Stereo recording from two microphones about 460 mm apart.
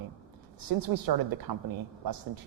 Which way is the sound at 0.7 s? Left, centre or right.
Right.